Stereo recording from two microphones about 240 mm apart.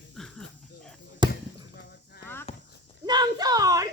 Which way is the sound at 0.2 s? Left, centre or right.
Centre.